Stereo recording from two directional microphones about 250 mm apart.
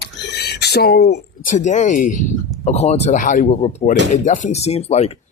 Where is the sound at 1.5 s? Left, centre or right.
Left.